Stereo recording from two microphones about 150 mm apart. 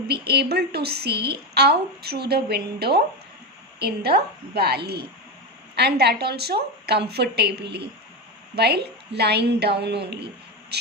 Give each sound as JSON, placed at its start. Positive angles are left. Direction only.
{"t": 0.1, "sound": "a woman's voice", "side_deg": -90}